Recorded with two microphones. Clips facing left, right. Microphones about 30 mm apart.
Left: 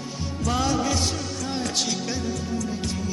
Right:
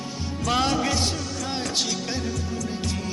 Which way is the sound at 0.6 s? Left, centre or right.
Right.